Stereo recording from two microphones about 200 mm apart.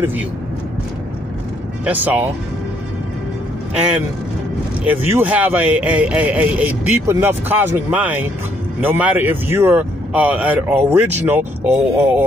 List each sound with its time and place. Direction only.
1.9 s speech: 10° right (ahead or behind)
4.8 s speech: 10° right (ahead or behind)